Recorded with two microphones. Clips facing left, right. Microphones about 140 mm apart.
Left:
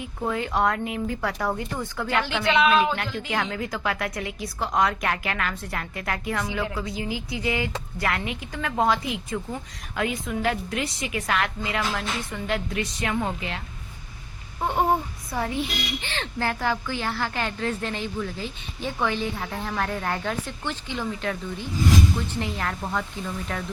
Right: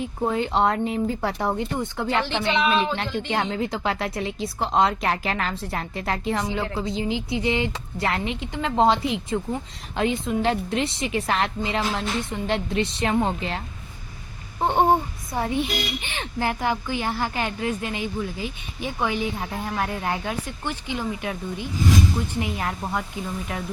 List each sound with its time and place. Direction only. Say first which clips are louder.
0.0 s a woman's voice: right 4 dB; 30° right (ahead or behind)
14.6 s a child's voice: right 4 dB; 30° right (ahead or behind); by 23.6 s 15° right (ahead or behind)